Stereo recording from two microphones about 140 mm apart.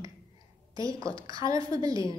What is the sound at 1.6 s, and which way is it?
Speech, 25° right (ahead or behind).